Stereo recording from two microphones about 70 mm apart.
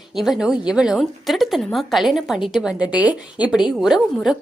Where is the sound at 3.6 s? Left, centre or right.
Centre.